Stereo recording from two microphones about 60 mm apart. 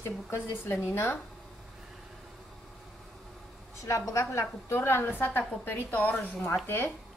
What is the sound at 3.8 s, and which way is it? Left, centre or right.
Speech, left.